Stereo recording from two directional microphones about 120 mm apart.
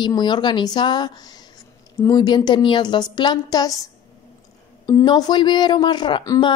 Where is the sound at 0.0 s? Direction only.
40° left (ahead or behind).